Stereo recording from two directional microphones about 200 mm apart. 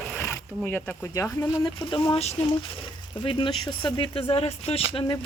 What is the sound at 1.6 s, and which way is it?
Speech, 25° left (ahead or behind).